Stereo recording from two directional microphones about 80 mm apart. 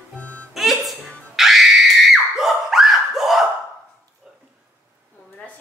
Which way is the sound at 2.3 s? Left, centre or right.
Centre.